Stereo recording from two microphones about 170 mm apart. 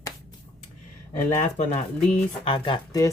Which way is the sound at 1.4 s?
40° left (ahead or behind).